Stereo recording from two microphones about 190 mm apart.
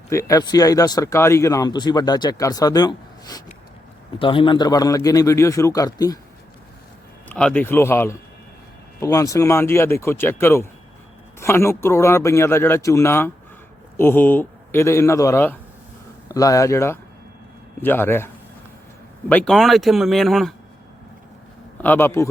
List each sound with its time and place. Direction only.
0.1 s a man's voice: 15° left (ahead or behind)
7.3 s a man's voice: 5° left (ahead or behind)
19.3 s speech: 5° left (ahead or behind)
21.8 s a man's voice: 10° left (ahead or behind)